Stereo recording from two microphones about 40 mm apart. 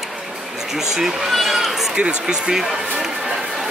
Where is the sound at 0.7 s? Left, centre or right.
Centre.